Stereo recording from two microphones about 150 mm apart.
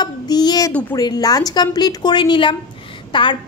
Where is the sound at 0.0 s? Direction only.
25° left (ahead or behind).